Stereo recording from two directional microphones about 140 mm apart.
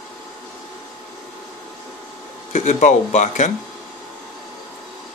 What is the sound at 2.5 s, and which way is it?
Speech, 60° left (ahead or behind).